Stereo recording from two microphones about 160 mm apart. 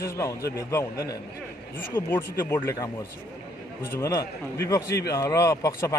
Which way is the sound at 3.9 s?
20° left (ahead or behind).